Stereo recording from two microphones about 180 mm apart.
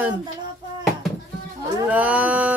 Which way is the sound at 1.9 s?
10° right (ahead or behind).